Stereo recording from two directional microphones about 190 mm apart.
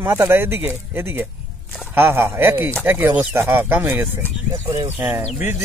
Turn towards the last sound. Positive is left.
turn(degrees=-10)  # may be behind; listen again after turning